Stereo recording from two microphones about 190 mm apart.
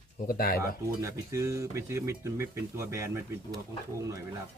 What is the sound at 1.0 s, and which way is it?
Speech, 15° right (ahead or behind).